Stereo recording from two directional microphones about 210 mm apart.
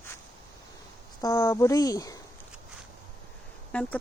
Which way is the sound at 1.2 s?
15° left (ahead or behind).